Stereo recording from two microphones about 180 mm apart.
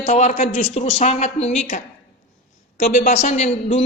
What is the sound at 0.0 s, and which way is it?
Speech, 40° left (ahead or behind).